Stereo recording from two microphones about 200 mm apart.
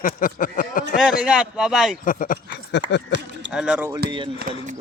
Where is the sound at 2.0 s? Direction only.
40° left (ahead or behind).